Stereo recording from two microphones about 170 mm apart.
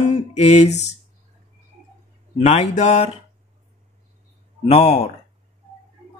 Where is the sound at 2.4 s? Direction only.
40° left (ahead or behind).